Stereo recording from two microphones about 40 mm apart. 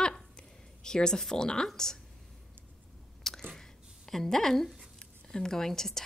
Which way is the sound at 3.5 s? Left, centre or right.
Centre.